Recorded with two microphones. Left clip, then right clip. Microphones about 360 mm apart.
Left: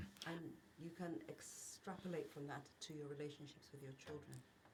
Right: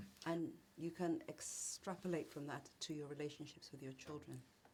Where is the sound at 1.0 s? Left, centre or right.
Right.